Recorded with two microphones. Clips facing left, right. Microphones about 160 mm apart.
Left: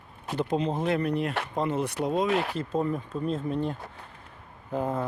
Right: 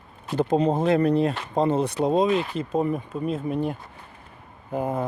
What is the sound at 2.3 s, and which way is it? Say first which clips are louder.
Speech: right 3 dB; 70° left (ahead or behind).